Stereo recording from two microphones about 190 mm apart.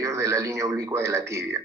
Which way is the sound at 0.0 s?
15° right (ahead or behind).